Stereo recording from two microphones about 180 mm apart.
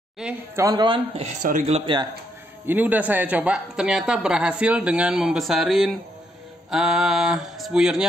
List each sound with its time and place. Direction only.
0.2 s speech: 5° right (ahead or behind)
0.7 s a man's voice: 25° right (ahead or behind); by 1.8 s 45° right (ahead or behind)
2.6 s a man's voice: 10° right (ahead or behind)